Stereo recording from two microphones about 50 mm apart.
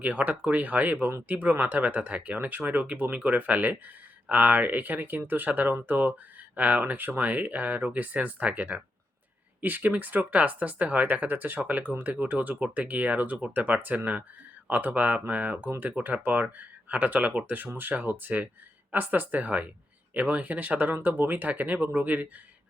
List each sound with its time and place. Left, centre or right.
0.0 s speech: right
20.9 s speech: right